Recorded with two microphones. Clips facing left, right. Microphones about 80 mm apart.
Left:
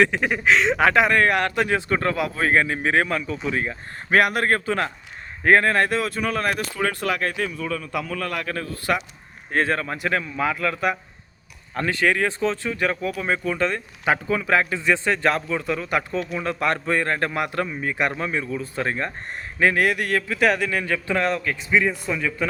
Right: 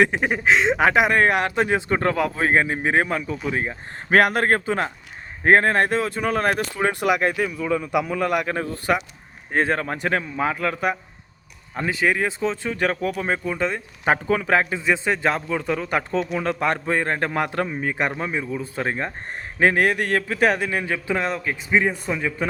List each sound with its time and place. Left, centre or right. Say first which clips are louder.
0.0 s speech: even; right
7.0 s a man's voice: right 4 dB; centre
11.7 s speech: even; centre
12.6 s a man's voice: right 1 dB; right
13.2 s speech: left 4 dB; right
14.0 s a man's voice: right 2 dB; right
14.6 s speech: even; right
15.4 s a man's voice: right 1 dB; right
17.3 s a man's voice: right 2 dB; right
19.5 s a man's voice: right 1 dB; right